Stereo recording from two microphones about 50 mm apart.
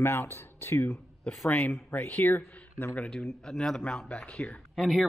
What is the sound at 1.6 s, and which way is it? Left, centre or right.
Speech, left.